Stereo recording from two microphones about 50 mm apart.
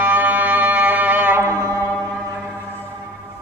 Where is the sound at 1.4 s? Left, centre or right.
Right.